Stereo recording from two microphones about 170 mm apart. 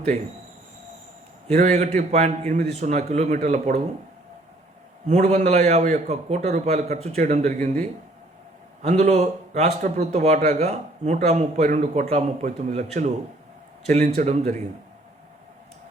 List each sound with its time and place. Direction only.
1.5 s a man's voice: 45° right (ahead or behind)
5.0 s a man's voice: 40° right (ahead or behind)